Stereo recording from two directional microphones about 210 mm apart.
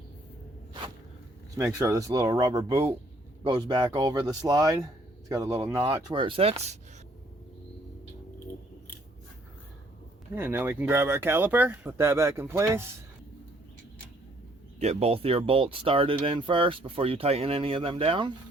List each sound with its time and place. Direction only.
1.5 s speech: 15° right (ahead or behind)
10.3 s speech: 10° right (ahead or behind)
14.8 s speech: 30° right (ahead or behind)